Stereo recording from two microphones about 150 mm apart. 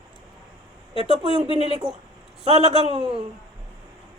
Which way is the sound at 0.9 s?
40° right (ahead or behind).